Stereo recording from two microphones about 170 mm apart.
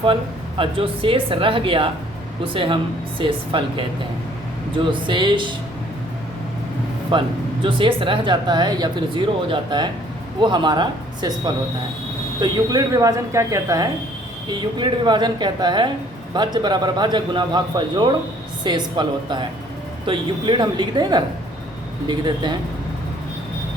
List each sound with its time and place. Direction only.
0.0 s speech: 30° right (ahead or behind)
7.1 s speech: 30° right (ahead or behind)